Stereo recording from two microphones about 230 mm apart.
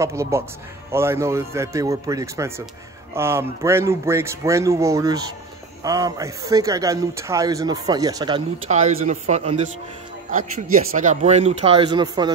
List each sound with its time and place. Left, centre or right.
0.0 s a man's voice: centre
8.6 s speech: right